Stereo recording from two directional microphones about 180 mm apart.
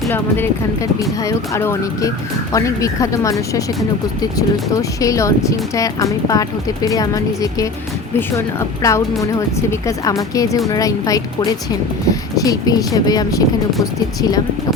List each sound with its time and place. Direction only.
0.1 s speech: 10° left (ahead or behind)